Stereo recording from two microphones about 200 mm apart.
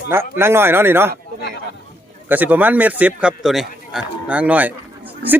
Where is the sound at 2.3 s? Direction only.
10° right (ahead or behind).